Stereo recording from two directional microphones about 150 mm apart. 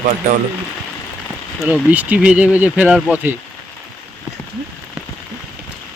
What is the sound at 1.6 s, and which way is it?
Speech, 10° right (ahead or behind).